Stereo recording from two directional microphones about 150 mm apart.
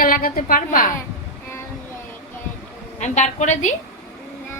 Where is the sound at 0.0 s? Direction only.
70° left (ahead or behind).